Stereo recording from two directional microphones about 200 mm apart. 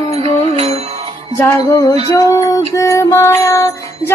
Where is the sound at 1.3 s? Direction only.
15° left (ahead or behind).